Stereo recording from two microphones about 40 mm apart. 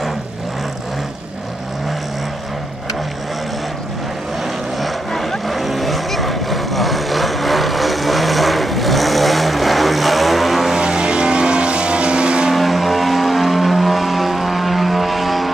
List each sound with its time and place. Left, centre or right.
4.7 s vehicle: centre
10.8 s vehicle: right
12.5 s vehicle: centre